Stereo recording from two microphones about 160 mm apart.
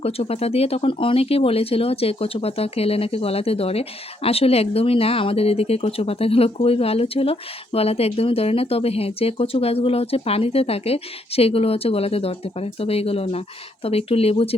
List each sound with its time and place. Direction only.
0.0 s speech: 40° left (ahead or behind)